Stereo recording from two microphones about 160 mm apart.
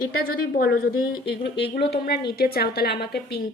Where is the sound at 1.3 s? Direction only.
90° left.